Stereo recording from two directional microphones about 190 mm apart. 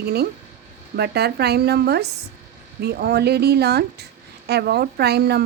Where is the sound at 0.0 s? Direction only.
55° right (ahead or behind).